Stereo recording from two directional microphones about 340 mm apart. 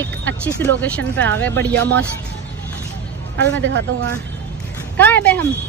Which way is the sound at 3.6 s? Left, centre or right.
Right.